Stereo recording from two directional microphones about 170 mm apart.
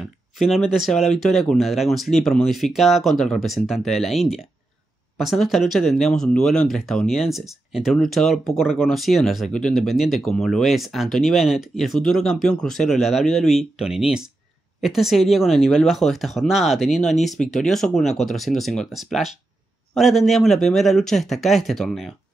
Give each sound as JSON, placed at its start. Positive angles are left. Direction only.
{"t": 0.4, "sound": "speech", "side_deg": 0}